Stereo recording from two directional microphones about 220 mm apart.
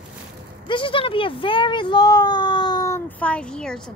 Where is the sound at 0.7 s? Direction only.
25° left (ahead or behind).